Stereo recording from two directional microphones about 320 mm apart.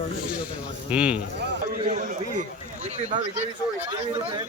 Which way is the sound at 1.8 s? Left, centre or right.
Right.